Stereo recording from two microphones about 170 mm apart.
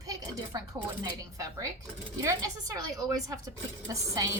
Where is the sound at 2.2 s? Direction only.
20° right (ahead or behind).